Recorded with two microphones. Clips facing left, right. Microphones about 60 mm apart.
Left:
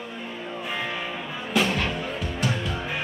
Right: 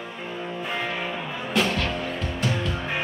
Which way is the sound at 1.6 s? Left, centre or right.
Centre.